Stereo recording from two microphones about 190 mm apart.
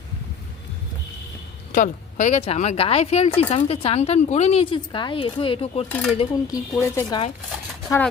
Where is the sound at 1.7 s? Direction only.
40° left (ahead or behind).